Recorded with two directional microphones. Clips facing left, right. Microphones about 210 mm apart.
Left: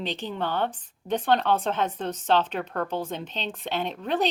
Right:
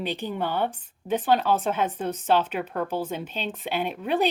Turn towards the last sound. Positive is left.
turn(degrees=-10)  # may be behind; listen again after turning